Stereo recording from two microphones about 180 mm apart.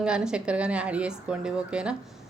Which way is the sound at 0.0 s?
5° right (ahead or behind).